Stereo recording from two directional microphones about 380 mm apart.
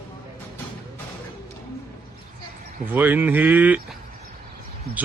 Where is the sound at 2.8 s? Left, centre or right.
Centre.